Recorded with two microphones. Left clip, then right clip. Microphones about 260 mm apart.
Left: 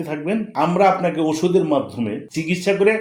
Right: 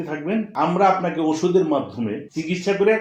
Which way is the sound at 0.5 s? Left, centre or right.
Left.